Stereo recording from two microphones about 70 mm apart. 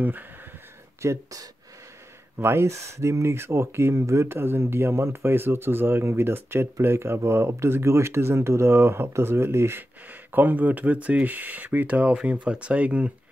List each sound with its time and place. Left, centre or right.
0.0 s speech: right
1.0 s speech: right
2.3 s speech: right; by 13.1 s centre